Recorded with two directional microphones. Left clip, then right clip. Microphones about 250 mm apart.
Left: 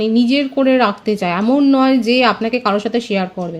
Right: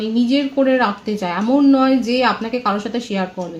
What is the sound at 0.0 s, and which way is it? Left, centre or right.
Speech, left.